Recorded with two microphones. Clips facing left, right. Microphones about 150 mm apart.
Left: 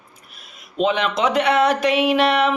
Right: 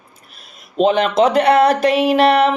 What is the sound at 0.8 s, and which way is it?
Speech, 40° right (ahead or behind).